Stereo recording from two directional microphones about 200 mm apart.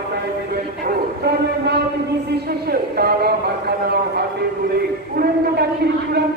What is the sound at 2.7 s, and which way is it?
Speech, 50° right (ahead or behind).